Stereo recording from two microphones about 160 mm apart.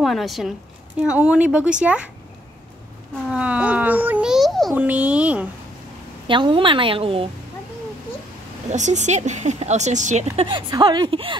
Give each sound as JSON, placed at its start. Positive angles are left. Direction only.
{"t": 0.0, "sound": "a woman's voice", "side_deg": 0}
{"t": 3.3, "sound": "speech", "side_deg": -5}
{"t": 6.2, "sound": "a woman's voice", "side_deg": -30}
{"t": 8.6, "sound": "a woman's voice", "side_deg": -45}